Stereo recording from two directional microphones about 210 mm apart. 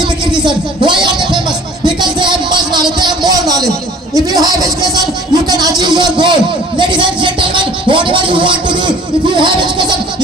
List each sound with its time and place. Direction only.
0.3 s speech: 20° right (ahead or behind)
1.8 s music: 20° right (ahead or behind)
4.3 s a sound: 20° right (ahead or behind)